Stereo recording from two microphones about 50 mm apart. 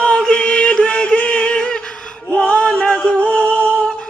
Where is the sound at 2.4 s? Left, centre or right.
Left.